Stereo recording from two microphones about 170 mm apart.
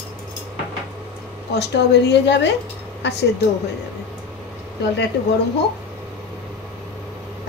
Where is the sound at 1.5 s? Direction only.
85° left.